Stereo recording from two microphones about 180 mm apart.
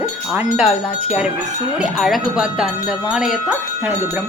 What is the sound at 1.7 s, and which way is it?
Speech, centre (ahead or behind).